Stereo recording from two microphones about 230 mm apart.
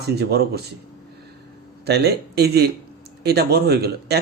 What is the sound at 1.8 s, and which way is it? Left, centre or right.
Speech, right.